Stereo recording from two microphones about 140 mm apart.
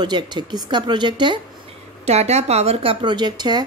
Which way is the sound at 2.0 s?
50° right (ahead or behind).